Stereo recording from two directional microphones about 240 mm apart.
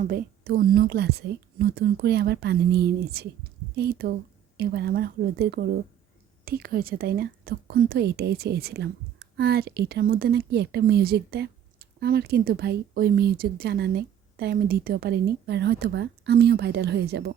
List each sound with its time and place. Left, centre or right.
0.1 s speech: right